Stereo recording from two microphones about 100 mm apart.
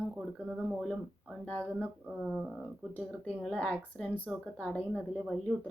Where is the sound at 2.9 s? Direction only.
15° left (ahead or behind).